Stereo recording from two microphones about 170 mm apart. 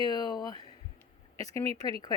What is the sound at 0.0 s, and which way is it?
A woman's voice, 25° left (ahead or behind).